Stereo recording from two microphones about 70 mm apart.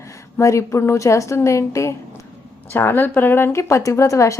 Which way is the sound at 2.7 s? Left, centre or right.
Left.